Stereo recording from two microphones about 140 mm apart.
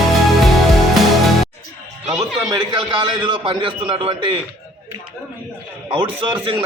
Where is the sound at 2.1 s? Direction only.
30° right (ahead or behind).